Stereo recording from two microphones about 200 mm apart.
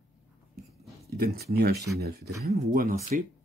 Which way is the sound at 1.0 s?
50° right (ahead or behind).